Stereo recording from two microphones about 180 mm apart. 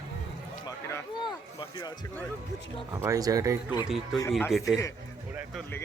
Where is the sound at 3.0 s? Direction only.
20° right (ahead or behind).